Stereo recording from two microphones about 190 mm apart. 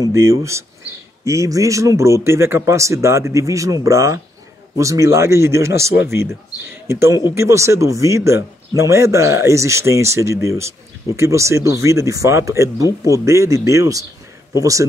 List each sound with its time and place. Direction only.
0.0 s speech: 15° right (ahead or behind)
6.9 s speech: 15° right (ahead or behind)